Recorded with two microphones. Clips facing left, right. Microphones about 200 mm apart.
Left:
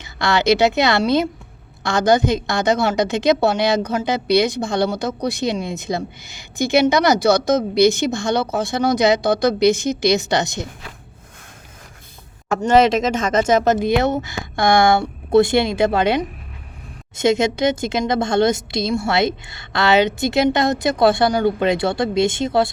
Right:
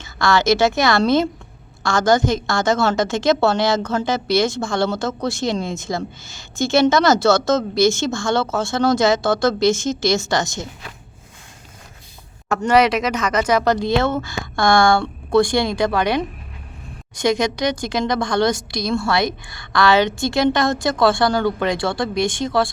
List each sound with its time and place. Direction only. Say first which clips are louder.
0.0 s a woman's voice: right 1 dB; 20° left (ahead or behind)
12.6 s a woman's voice: left 2 dB; 25° left (ahead or behind)